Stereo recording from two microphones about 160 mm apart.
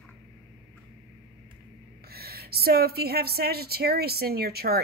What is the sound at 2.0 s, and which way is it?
A woman's voice, 75° right (ahead or behind).